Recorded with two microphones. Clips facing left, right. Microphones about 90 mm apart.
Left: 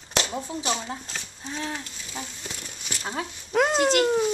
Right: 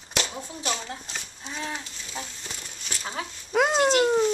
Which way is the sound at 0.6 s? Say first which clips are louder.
Right 1 dB; 15° left (ahead or behind).